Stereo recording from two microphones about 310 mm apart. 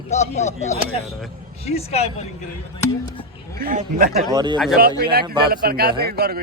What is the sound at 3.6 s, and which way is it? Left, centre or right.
Speech, right.